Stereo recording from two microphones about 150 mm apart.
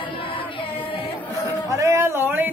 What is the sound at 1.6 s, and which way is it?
Speech, 20° right (ahead or behind).